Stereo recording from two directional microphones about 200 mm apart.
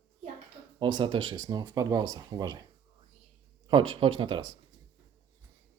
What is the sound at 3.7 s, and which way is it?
Speech, 25° right (ahead or behind).